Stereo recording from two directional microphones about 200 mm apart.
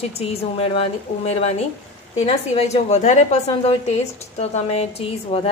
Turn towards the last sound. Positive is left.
turn(degrees=30)  # may be behind; listen again after turning